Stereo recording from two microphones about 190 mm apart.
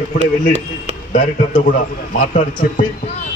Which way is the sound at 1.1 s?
40° left (ahead or behind).